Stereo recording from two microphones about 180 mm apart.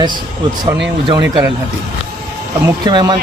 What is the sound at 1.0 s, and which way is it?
Speech, 20° right (ahead or behind).